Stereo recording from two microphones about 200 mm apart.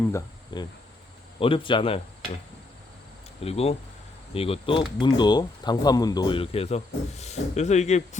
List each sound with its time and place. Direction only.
0.5 s speech: 20° left (ahead or behind)
3.4 s speech: 30° left (ahead or behind)